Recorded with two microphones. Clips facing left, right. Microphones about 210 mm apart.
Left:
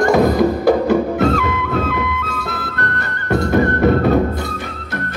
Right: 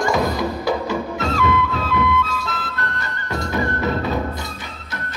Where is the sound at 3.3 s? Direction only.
55° left (ahead or behind).